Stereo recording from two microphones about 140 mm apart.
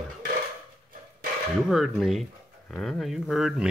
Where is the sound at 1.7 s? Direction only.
Centre (ahead or behind).